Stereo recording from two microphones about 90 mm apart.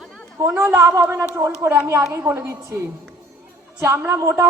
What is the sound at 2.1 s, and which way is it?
Speech, 20° right (ahead or behind).